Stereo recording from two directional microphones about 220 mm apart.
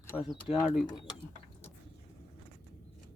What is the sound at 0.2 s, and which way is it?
Speech, centre (ahead or behind).